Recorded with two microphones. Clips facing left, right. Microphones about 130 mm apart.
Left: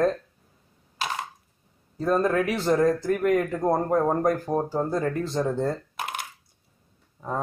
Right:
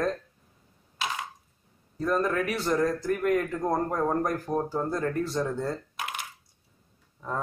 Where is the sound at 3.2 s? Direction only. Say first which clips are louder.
Left 3 dB; 50° left (ahead or behind).